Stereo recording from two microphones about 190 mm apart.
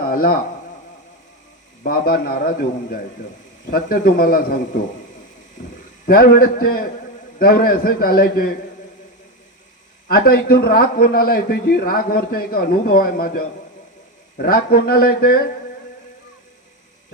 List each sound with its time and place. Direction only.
0.0 s a sound: 50° left (ahead or behind)
1.8 s a man's voice: 50° left (ahead or behind)
6.1 s a man's voice: 50° left (ahead or behind)
10.1 s a man's voice: 55° left (ahead or behind)